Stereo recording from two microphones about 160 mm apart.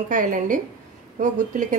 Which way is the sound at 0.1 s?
55° right (ahead or behind).